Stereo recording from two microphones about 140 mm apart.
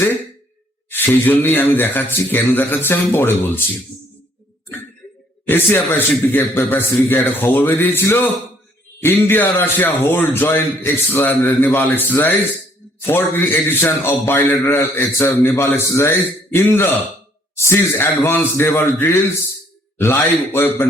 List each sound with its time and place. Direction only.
0.9 s a man's voice: 15° left (ahead or behind)
5.5 s a man's voice: 15° left (ahead or behind)